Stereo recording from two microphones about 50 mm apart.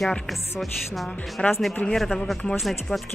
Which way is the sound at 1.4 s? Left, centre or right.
Centre.